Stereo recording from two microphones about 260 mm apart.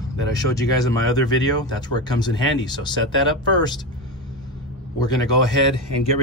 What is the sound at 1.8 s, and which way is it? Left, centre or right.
Speech, centre.